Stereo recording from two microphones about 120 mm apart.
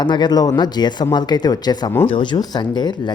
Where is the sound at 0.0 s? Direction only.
40° left (ahead or behind).